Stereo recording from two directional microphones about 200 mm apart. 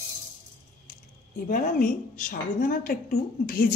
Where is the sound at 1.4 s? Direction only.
45° left (ahead or behind).